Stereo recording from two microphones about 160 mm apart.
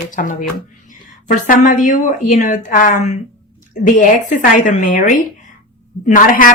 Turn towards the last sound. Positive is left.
turn(degrees=55)  # may be behind; listen again after turning